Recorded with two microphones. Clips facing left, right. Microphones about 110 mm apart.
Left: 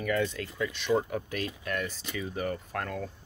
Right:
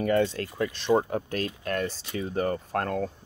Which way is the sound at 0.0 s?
35° right (ahead or behind).